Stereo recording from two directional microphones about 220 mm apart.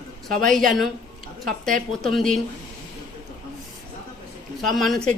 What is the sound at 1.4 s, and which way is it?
Speech, 40° right (ahead or behind).